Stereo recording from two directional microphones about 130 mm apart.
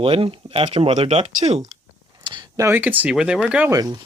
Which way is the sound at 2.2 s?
35° right (ahead or behind).